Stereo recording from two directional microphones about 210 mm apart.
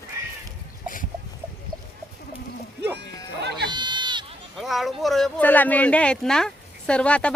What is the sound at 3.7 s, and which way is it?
Sheep, 20° right (ahead or behind).